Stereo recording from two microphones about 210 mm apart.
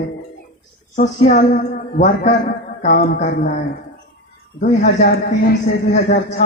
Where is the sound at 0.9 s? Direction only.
35° left (ahead or behind).